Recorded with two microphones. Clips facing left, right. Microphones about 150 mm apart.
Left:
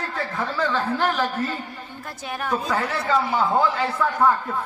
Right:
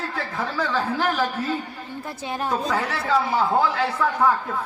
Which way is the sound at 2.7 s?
Centre (ahead or behind).